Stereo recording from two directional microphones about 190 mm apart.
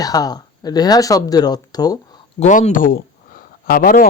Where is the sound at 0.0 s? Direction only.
20° left (ahead or behind).